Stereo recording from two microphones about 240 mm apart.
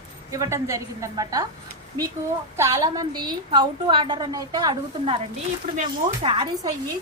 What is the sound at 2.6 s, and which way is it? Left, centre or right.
A woman's voice, centre.